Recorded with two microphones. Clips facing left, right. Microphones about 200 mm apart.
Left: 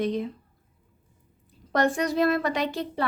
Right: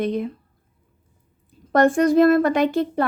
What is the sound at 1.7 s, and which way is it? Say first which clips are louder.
A woman's voice: right 8 dB; 50° right (ahead or behind).